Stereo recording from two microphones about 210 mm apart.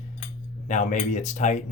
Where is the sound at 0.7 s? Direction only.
35° left (ahead or behind).